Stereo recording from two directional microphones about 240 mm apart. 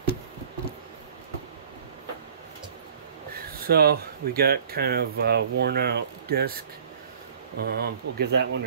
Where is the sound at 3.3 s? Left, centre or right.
Right.